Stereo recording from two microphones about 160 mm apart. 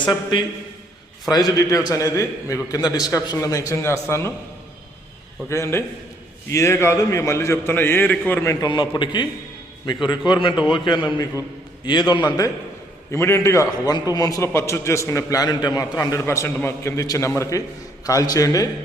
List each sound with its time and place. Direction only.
0.1 s a man's voice: 30° left (ahead or behind)
5.5 s a man's voice: 15° left (ahead or behind)
8.6 s a man's voice: 30° left (ahead or behind)
13.1 s a man's voice: 15° left (ahead or behind)